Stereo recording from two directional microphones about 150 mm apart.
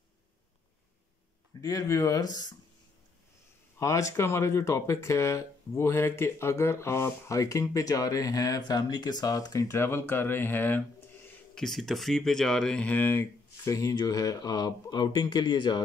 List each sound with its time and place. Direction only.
1.6 s speech: 25° left (ahead or behind)
3.8 s speech: 20° left (ahead or behind)
11.5 s speech: centre (ahead or behind); by 15.8 s 30° left (ahead or behind)